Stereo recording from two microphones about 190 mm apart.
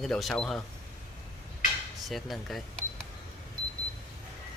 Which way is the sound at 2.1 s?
Centre (ahead or behind).